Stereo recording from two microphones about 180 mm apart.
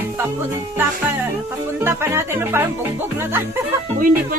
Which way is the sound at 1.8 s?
15° right (ahead or behind).